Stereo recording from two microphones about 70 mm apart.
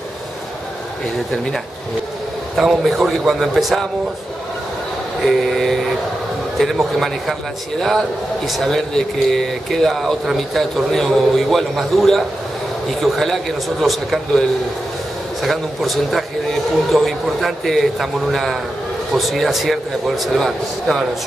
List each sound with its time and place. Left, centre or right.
2.5 s speech: centre
5.2 s speech: centre
8.5 s speech: centre
15.4 s speech: centre